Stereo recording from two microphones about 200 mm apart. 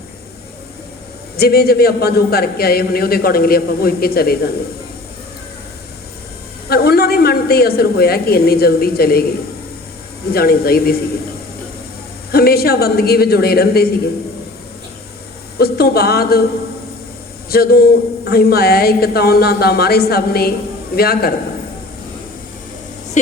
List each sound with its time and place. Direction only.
1.4 s a man's voice: 50° left (ahead or behind)
6.7 s a woman's voice: 50° left (ahead or behind)
10.2 s a man's voice: 50° left (ahead or behind)
12.3 s a man's voice: 50° left (ahead or behind)
15.5 s a man's voice: 50° left (ahead or behind)
17.5 s a man's voice: 50° left (ahead or behind)